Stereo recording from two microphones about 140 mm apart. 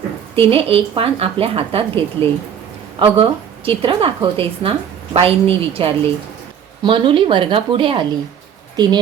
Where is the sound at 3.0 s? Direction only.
40° right (ahead or behind).